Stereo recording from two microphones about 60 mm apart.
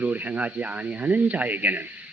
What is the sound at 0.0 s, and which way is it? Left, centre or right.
A man's voice, right.